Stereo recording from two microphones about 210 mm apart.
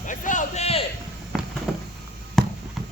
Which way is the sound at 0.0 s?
40° left (ahead or behind).